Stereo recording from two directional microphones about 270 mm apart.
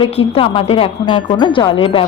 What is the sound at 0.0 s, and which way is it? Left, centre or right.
Speech, left.